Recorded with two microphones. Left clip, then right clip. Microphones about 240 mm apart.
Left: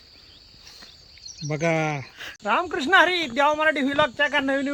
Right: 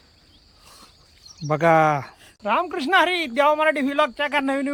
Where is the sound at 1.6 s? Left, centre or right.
Centre.